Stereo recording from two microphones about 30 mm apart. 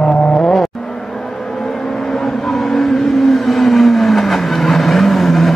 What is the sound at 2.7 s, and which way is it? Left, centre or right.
Vehicle, centre.